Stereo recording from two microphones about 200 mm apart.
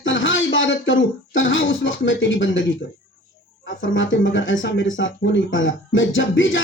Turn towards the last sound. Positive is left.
turn(degrees=70)  # may be behind; listen again after turning